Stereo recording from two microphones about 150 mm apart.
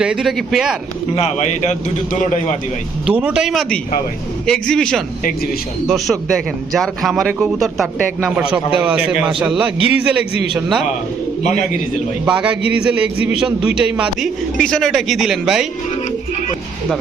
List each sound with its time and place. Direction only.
0.0 s a man's voice: 5° right (ahead or behind)
1.1 s a man's voice: 50° left (ahead or behind)
3.1 s a man's voice: 5° right (ahead or behind)
12.3 s a man's voice: 10° right (ahead or behind)